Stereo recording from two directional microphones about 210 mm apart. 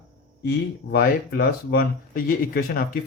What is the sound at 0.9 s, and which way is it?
A man's voice, 50° left (ahead or behind).